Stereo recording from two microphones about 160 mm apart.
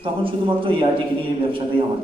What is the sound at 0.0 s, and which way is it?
A man's voice, 35° right (ahead or behind).